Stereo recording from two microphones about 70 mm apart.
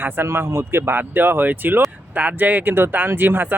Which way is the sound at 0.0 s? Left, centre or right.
Right.